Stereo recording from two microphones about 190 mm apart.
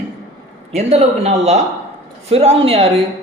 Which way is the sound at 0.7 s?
35° right (ahead or behind).